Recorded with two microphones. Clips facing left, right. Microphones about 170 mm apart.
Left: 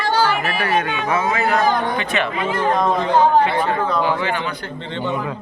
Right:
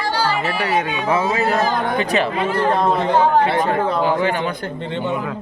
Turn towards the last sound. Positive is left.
turn(degrees=-45)  # may be behind; listen again after turning